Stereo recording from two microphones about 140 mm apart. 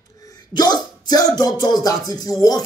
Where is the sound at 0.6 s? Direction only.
30° left (ahead or behind).